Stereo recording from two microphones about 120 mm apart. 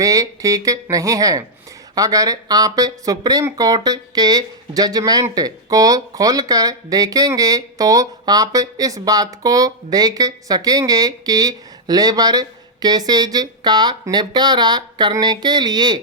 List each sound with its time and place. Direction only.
0.0 s speech: 30° right (ahead or behind)